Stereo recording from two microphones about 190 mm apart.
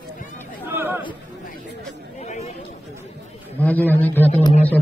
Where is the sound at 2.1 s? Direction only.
35° left (ahead or behind).